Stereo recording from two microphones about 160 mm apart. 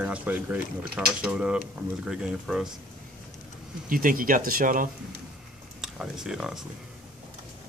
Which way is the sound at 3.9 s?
60° right (ahead or behind).